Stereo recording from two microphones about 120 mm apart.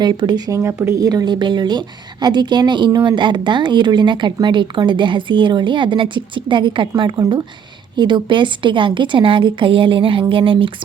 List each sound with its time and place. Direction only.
0.0 s a woman's voice: 40° right (ahead or behind)
0.6 s a woman's voice: 20° right (ahead or behind)
0.9 s a woman's voice: 30° right (ahead or behind)